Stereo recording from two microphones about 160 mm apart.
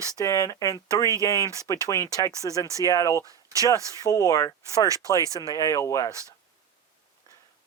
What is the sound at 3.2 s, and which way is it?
Speech, 20° right (ahead or behind).